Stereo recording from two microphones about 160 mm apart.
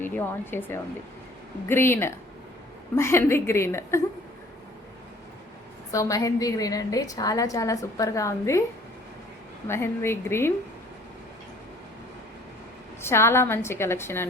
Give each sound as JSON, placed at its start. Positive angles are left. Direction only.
{"t": 0.0, "sound": "a woman's voice", "side_deg": 15}
{"t": 5.9, "sound": "a woman's voice", "side_deg": 20}
{"t": 9.6, "sound": "a woman's voice", "side_deg": 15}
{"t": 13.0, "sound": "a woman's voice", "side_deg": 15}